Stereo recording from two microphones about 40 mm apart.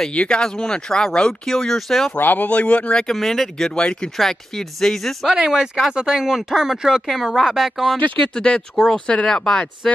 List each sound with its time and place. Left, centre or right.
0.1 s speech: left
0.4 s speech: centre
2.1 s speech: left
3.2 s speech: centre
3.7 s speech: left
4.2 s speech: centre
5.3 s speech: centre
8.4 s speech: left